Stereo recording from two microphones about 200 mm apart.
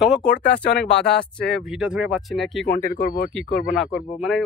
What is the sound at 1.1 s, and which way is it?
Speech, 5° left (ahead or behind).